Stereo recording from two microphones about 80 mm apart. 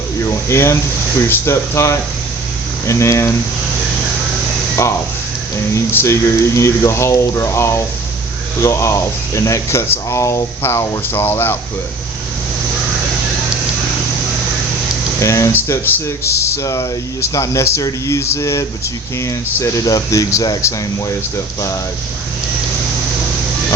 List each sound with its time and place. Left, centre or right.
0.3 s speech: left
5.7 s speech: left
15.2 s speech: left